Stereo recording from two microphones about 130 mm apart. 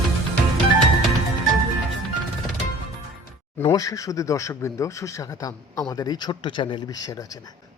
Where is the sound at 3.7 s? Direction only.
25° left (ahead or behind).